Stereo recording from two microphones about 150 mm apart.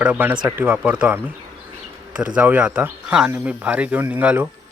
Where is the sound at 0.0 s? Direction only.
10° right (ahead or behind).